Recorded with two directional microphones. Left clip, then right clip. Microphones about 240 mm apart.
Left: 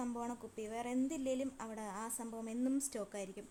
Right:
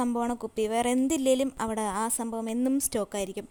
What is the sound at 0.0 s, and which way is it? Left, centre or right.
Speech, right.